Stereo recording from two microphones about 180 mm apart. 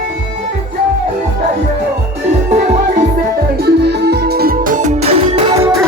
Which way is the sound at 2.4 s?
40° right (ahead or behind).